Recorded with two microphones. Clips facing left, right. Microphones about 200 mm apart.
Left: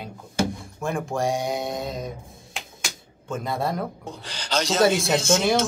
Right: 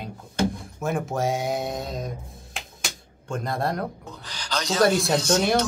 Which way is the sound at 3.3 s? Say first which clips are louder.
Even; 5° left (ahead or behind).